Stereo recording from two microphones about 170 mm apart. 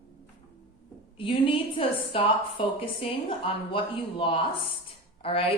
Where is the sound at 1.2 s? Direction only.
30° left (ahead or behind).